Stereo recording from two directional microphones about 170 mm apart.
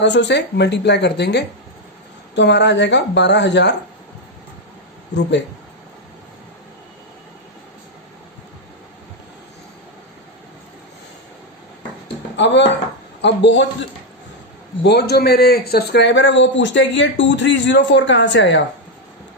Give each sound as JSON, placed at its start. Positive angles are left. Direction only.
{"t": 0.0, "sound": "a man's voice", "side_deg": 90}
{"t": 12.4, "sound": "a man's voice", "side_deg": 90}
{"t": 14.8, "sound": "a man's voice", "side_deg": 75}